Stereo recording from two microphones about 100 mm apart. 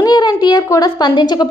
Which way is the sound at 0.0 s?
45° left (ahead or behind).